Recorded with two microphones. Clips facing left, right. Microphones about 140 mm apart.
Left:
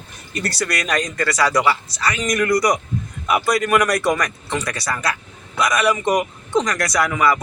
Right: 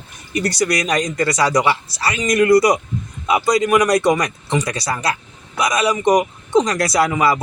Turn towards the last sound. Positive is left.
turn(degrees=-30)  # may be behind; listen again after turning